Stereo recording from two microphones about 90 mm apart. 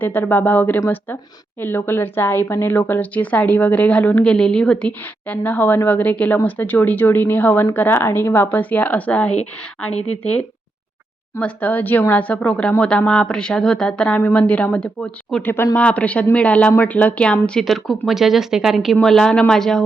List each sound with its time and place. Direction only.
0.0 s a woman's voice: 20° left (ahead or behind); by 19.8 s 5° left (ahead or behind)